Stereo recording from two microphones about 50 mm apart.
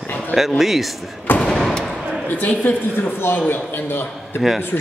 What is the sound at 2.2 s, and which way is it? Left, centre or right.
A woman's voice, left.